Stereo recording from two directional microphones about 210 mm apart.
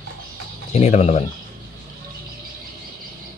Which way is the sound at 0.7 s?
30° left (ahead or behind).